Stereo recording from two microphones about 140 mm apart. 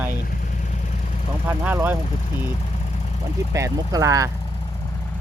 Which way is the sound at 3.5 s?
20° right (ahead or behind).